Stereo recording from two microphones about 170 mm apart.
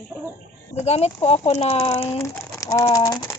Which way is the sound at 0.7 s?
40° left (ahead or behind).